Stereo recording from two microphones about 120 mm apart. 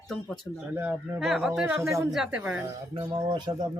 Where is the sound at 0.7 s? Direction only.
15° right (ahead or behind).